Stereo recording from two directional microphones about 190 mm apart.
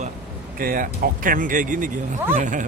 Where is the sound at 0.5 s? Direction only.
45° right (ahead or behind).